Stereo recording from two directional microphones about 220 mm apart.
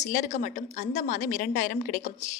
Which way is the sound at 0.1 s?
35° left (ahead or behind).